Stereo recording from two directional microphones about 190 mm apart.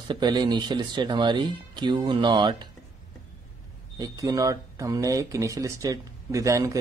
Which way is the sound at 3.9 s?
20° right (ahead or behind).